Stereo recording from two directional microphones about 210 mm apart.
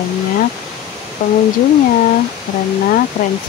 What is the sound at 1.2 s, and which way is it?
Speech, 40° left (ahead or behind).